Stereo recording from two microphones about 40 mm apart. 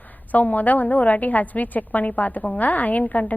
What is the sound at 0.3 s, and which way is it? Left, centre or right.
A woman's voice, left.